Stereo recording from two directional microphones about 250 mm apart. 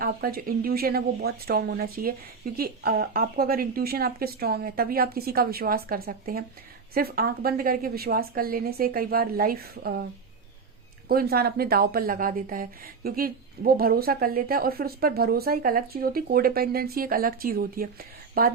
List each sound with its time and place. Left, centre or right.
0.0 s speech: right
11.1 s speech: right